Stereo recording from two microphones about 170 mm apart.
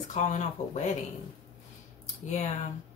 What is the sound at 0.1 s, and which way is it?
Speech, 45° left (ahead or behind).